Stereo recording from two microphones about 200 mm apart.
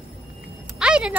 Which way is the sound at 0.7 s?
5° right (ahead or behind).